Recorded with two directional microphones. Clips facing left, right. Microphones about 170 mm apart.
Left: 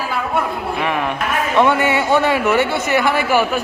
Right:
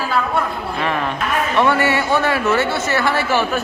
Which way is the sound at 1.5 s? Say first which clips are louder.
Left 2 dB; 15° left (ahead or behind).